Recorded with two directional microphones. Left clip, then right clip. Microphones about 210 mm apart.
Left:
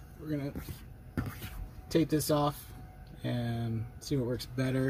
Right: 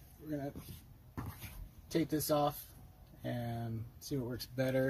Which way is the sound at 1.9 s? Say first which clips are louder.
Left 5 dB; 20° right (ahead or behind).